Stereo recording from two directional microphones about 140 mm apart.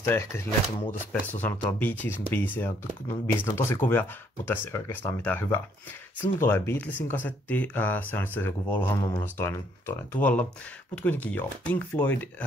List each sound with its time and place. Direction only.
0.0 s speech: 20° left (ahead or behind)
11.0 s speech: 10° left (ahead or behind)